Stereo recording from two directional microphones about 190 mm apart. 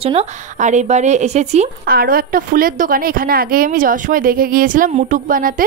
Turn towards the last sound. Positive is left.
turn(degrees=-45)  # may be behind; listen again after turning